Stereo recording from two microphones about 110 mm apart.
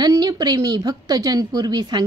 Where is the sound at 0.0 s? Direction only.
40° right (ahead or behind).